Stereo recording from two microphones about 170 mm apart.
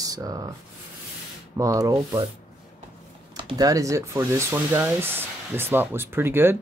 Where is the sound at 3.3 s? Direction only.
25° right (ahead or behind).